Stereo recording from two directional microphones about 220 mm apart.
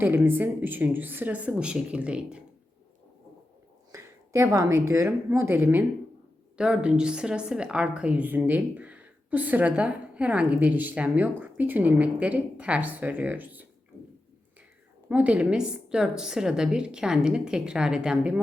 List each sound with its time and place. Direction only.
0.0 s a woman's voice: 10° right (ahead or behind)
3.9 s a woman's voice: 15° right (ahead or behind)
15.1 s a woman's voice: 5° right (ahead or behind)